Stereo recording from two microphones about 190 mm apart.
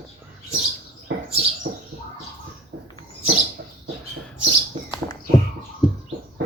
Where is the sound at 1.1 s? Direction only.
65° right (ahead or behind).